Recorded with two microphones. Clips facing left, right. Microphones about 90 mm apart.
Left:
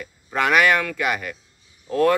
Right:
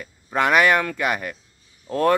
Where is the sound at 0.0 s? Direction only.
25° right (ahead or behind).